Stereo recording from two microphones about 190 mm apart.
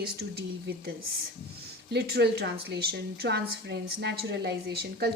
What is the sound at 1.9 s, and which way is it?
A woman's voice, 55° right (ahead or behind).